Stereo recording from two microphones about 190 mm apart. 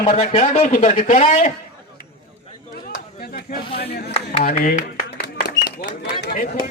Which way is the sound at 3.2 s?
50° left (ahead or behind).